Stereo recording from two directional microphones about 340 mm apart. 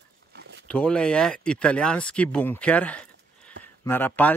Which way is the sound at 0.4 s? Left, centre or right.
Right.